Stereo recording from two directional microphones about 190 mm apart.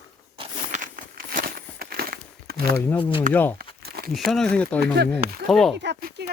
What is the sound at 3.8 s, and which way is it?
Crumpling, 55° right (ahead or behind).